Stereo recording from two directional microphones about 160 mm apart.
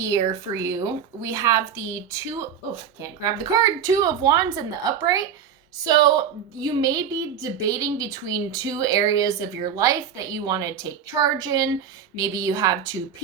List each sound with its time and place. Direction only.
0.0 s a woman's voice: 20° right (ahead or behind)